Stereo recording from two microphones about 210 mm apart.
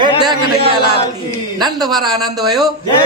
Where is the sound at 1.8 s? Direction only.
20° right (ahead or behind).